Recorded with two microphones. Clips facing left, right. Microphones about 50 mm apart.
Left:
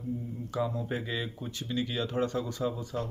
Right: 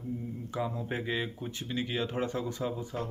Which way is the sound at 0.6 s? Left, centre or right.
Right.